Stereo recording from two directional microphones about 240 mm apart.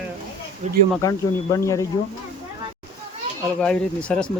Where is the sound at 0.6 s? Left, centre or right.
Right.